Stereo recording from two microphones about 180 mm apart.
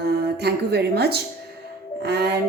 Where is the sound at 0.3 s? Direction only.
65° right (ahead or behind).